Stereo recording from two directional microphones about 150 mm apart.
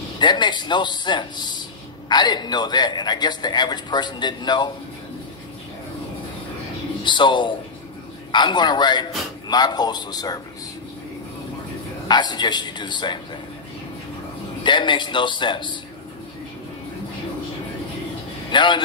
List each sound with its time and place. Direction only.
0.2 s a man's voice: 30° left (ahead or behind)
7.0 s a man's voice: 30° left (ahead or behind)
12.1 s a man's voice: 30° left (ahead or behind)
14.6 s a man's voice: 30° left (ahead or behind)
18.5 s a man's voice: 30° left (ahead or behind)